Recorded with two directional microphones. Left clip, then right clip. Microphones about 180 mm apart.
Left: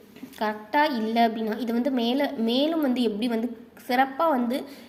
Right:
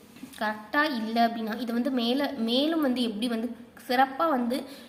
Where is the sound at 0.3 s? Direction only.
20° left (ahead or behind).